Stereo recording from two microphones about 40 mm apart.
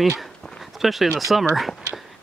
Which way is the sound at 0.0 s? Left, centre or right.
Centre.